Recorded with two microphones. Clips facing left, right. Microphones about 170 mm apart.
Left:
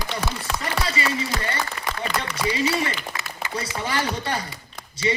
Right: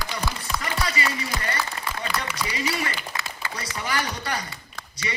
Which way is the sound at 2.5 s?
25° left (ahead or behind).